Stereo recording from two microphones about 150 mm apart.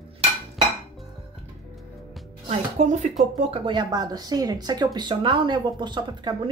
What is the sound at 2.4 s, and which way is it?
Speech, 50° right (ahead or behind).